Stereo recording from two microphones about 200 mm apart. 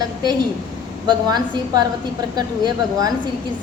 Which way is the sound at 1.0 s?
20° right (ahead or behind).